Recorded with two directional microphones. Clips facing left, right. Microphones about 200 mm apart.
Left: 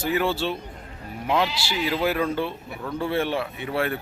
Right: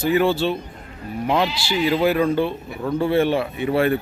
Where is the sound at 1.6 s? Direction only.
5° left (ahead or behind).